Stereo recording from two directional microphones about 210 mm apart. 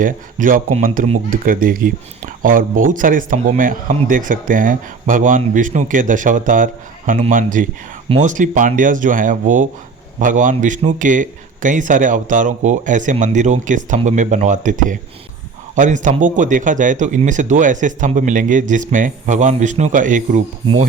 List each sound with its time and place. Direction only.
0.0 s speech: 40° right (ahead or behind)